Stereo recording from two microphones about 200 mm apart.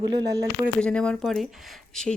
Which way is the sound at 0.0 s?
20° right (ahead or behind).